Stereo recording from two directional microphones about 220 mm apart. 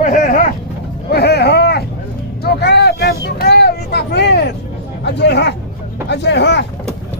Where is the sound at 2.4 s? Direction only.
50° left (ahead or behind).